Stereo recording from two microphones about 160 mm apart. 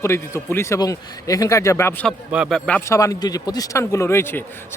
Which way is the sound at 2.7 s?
15° left (ahead or behind).